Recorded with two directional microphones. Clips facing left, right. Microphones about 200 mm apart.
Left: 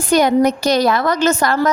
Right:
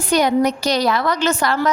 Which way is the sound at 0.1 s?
50° left (ahead or behind).